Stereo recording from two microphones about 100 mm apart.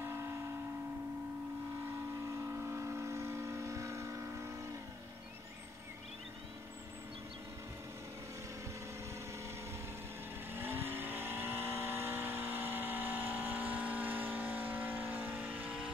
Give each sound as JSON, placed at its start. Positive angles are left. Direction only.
{"t": 0.0, "sound": "a sound", "side_deg": -25}
{"t": 2.4, "sound": "vehicle", "side_deg": -25}
{"t": 10.5, "sound": "vehicle", "side_deg": -20}